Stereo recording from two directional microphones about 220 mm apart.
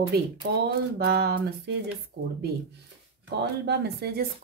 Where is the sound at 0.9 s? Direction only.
45° right (ahead or behind).